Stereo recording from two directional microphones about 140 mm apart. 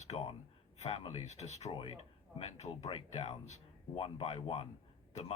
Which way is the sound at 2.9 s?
45° left (ahead or behind).